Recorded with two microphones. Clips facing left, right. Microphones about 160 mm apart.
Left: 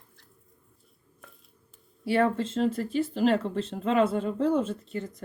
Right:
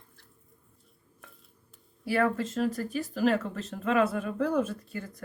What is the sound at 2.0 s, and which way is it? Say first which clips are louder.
Speech: left 2 dB; 25° left (ahead or behind).